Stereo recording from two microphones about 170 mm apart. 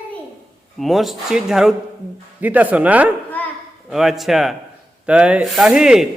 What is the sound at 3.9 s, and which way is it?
A man's voice, centre (ahead or behind).